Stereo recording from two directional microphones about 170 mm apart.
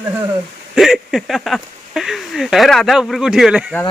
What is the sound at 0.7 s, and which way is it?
Speech, centre (ahead or behind).